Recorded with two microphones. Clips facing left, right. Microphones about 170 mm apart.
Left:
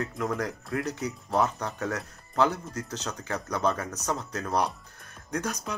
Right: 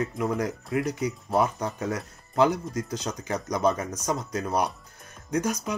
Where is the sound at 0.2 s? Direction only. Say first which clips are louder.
Right 1 dB; 5° right (ahead or behind).